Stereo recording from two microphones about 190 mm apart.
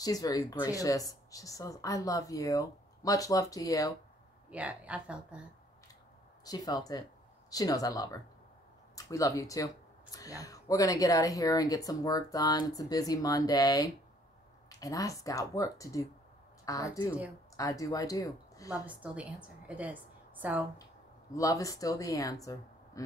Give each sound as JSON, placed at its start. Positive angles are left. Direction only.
{"t": 0.0, "sound": "speech", "side_deg": 20}
{"t": 4.5, "sound": "a woman's voice", "side_deg": -5}
{"t": 6.4, "sound": "speech", "side_deg": 20}
{"t": 18.9, "sound": "a woman's voice", "side_deg": -5}
{"t": 21.4, "sound": "speech", "side_deg": 15}